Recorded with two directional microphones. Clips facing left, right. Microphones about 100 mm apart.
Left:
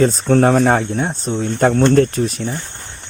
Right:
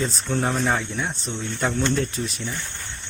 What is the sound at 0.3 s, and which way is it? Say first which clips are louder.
Speech: left 10 dB; 55° left (ahead or behind).